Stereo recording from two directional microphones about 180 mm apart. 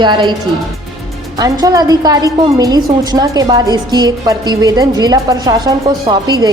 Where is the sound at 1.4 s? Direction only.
20° right (ahead or behind).